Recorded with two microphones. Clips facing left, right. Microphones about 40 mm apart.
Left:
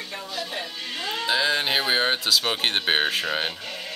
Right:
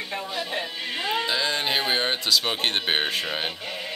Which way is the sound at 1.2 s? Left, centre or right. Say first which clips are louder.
Left 2 dB; centre.